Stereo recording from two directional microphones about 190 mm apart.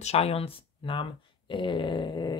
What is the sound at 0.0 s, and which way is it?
Speech, 35° left (ahead or behind).